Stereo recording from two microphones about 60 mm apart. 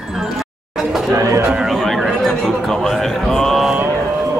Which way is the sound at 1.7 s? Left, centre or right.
Centre.